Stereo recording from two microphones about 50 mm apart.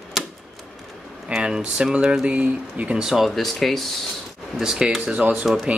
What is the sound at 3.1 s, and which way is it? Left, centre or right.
Speech, centre.